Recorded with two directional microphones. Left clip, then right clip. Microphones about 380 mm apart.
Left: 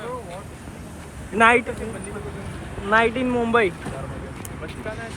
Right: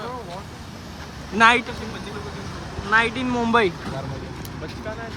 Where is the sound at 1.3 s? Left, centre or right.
Centre.